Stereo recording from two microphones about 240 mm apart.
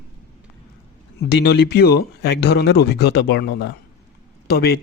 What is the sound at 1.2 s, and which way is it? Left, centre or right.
A man's voice, left.